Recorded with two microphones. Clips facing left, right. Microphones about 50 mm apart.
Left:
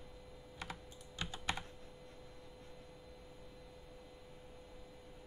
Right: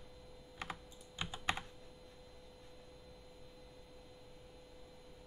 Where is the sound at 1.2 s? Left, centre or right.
Centre.